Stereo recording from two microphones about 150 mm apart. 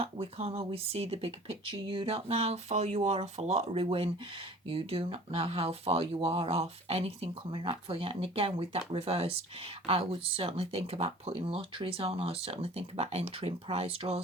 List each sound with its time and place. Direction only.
0.0 s speech: 40° right (ahead or behind)